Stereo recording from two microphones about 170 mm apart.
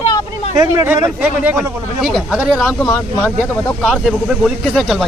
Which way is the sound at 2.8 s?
15° left (ahead or behind).